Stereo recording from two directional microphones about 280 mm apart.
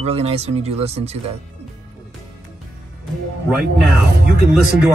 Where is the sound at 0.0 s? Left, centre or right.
Right.